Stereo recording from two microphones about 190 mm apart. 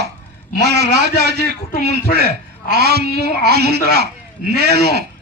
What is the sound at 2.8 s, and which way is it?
Speech, 55° right (ahead or behind).